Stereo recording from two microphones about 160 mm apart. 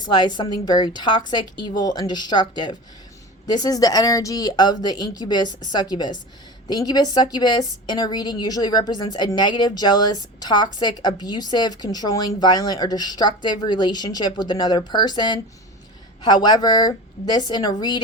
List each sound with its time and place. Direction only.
0.0 s a woman's voice: 25° left (ahead or behind)